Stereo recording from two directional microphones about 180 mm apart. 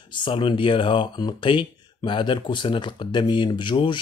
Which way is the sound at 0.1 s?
25° left (ahead or behind).